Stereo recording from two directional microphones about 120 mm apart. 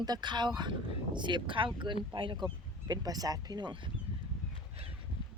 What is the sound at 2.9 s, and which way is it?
Speech, 30° right (ahead or behind).